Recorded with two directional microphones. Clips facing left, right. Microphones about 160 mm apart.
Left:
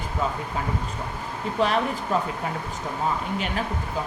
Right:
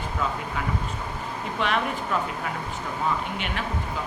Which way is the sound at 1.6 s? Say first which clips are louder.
Left 3 dB; 35° left (ahead or behind).